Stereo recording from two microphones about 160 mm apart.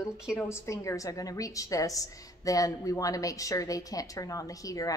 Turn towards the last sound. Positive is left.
turn(degrees=20)  # may be behind; listen again after turning